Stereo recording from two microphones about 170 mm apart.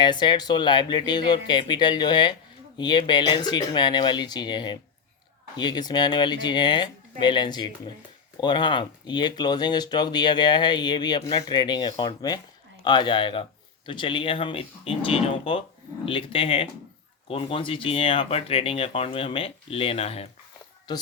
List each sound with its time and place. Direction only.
0.0 s speech: 25° left (ahead or behind)
20.9 s speech: 25° left (ahead or behind)